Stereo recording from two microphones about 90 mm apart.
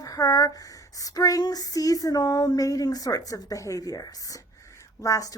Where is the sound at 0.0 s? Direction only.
45° left (ahead or behind).